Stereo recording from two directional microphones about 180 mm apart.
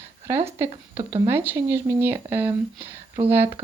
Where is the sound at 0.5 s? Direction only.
15° right (ahead or behind).